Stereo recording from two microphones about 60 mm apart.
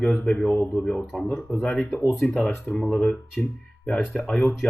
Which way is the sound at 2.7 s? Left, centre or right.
Centre.